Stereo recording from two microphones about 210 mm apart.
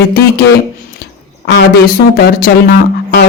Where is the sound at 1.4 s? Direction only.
50° left (ahead or behind).